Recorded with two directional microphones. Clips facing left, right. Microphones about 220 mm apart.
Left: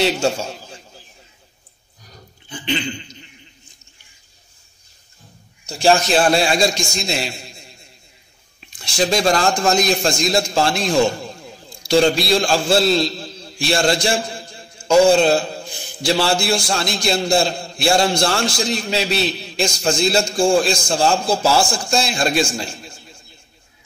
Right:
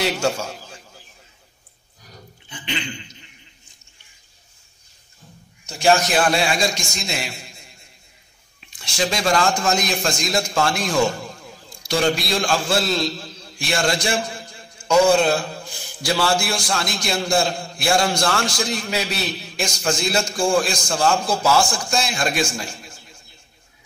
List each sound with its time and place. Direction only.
0.0 s a man's voice: 25° left (ahead or behind)
5.7 s a man's voice: 30° left (ahead or behind)
8.9 s a man's voice: 35° left (ahead or behind)